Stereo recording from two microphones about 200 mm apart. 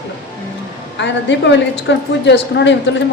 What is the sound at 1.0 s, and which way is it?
A woman's voice, 65° left (ahead or behind).